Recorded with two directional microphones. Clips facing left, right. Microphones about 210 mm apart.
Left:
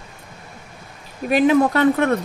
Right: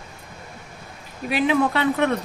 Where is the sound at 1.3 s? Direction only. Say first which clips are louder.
Left 5 dB; 45° left (ahead or behind).